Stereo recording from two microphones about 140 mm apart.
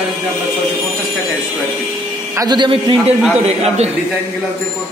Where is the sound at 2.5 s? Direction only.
35° right (ahead or behind).